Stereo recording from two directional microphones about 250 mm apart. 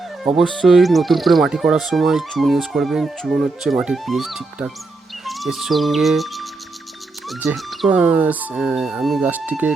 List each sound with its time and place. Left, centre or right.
0.2 s speech: centre
5.2 s music: centre
7.3 s speech: centre